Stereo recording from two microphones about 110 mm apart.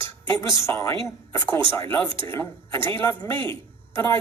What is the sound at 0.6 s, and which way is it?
Speech, 30° left (ahead or behind).